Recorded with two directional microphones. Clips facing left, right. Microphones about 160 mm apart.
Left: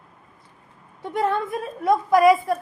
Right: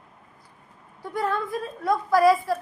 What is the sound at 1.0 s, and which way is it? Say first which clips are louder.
Speech: left 4 dB; 25° left (ahead or behind).